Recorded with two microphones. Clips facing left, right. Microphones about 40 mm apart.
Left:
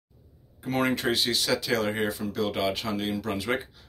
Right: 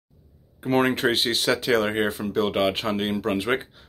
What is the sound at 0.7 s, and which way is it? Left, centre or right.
Speech, right.